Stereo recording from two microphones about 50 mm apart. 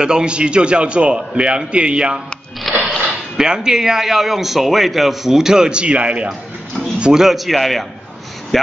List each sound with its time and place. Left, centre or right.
0.0 s a man's voice: centre
2.7 s a sound: centre
3.3 s a man's voice: centre